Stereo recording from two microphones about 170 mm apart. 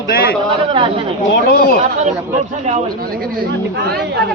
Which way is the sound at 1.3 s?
70° left (ahead or behind).